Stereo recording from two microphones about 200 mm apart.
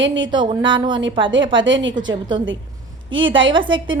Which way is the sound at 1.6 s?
65° right (ahead or behind).